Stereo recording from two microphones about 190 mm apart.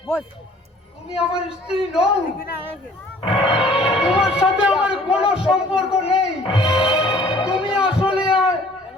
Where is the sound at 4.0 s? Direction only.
5° right (ahead or behind).